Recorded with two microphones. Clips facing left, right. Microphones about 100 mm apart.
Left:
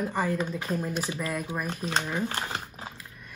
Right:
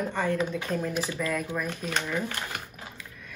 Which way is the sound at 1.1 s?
30° left (ahead or behind).